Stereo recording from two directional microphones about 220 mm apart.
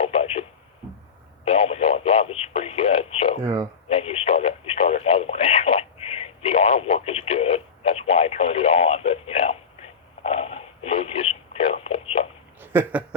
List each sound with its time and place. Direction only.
0.0 s radio: 25° left (ahead or behind)
1.5 s speech: 25° left (ahead or behind)
3.4 s speech: 15° right (ahead or behind)
3.8 s radio: 25° left (ahead or behind)
12.5 s a sound: 10° right (ahead or behind)